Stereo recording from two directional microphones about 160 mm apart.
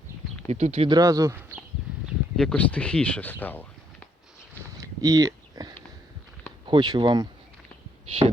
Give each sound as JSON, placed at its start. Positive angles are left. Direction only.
{"t": 0.4, "sound": "speech", "side_deg": -45}
{"t": 0.9, "sound": "speech", "side_deg": -20}
{"t": 2.3, "sound": "speech", "side_deg": 5}
{"t": 4.6, "sound": "a sound", "side_deg": -20}
{"t": 6.7, "sound": "speech", "side_deg": -25}
{"t": 8.0, "sound": "heart sounds", "side_deg": -35}